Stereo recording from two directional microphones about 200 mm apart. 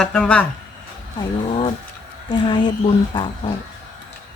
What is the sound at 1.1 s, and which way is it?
Speech, 25° left (ahead or behind).